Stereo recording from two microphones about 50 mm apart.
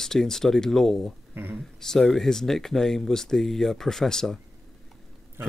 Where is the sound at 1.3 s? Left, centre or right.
Right.